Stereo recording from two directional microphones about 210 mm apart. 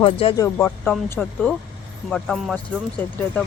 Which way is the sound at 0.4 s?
10° left (ahead or behind).